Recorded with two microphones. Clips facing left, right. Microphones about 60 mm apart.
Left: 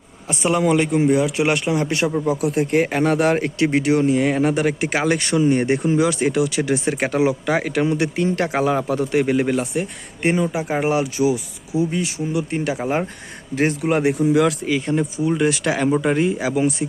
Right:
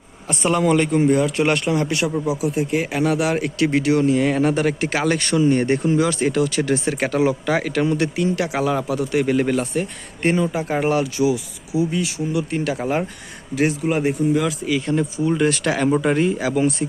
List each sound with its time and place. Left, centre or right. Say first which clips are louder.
0.3 s a man's voice: even; centre
1.9 s speech: left 1 dB; left
2.2 s speech: left 2 dB; left
2.5 s speech: left 3 dB; left
3.6 s speech: right 1 dB; left
8.1 s speech: left 1 dB; left
9.2 s a man's voice: even; centre
13.8 s speech: left 2 dB; left
14.7 s speech: even; left
15.3 s a man's voice: even; centre